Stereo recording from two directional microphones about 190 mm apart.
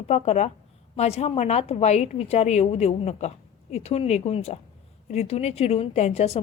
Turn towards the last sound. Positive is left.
turn(degrees=35)  # may be behind; listen again after turning